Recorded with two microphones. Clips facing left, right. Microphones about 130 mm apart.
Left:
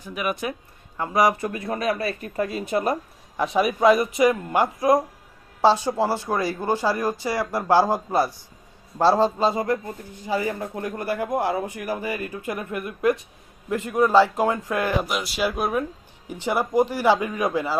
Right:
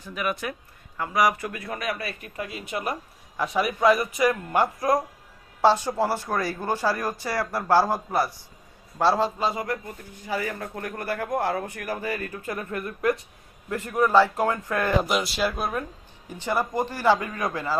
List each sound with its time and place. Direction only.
0.0 s a man's voice: 20° left (ahead or behind); by 3.0 s 35° left (ahead or behind)
3.3 s a man's voice: 20° left (ahead or behind)
15.0 s speech: 5° left (ahead or behind)